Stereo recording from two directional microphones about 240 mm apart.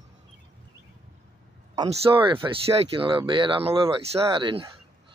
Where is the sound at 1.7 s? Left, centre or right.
Right.